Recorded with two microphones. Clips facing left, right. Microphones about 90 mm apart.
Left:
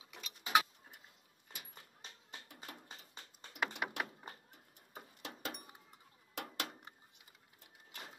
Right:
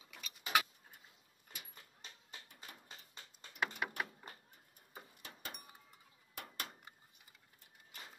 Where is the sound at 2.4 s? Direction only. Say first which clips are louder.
Left 4 dB; 65° left (ahead or behind).